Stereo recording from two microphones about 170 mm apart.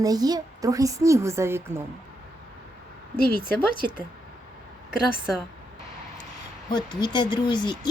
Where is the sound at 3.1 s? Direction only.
60° left (ahead or behind).